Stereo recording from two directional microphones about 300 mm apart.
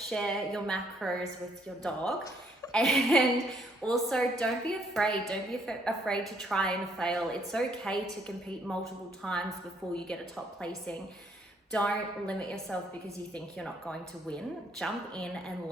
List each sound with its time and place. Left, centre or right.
0.1 s a woman's voice: centre
9.2 s a woman's voice: centre